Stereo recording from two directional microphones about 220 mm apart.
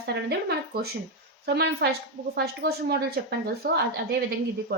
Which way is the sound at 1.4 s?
50° right (ahead or behind).